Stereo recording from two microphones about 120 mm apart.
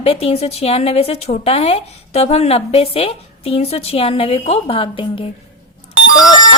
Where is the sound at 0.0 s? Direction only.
55° left (ahead or behind).